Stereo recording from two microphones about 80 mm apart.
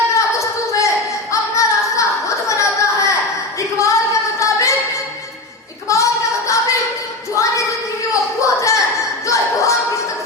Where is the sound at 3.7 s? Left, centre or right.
Left.